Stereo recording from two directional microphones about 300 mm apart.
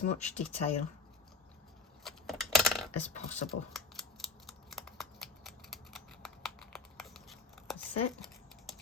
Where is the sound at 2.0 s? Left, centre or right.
Centre.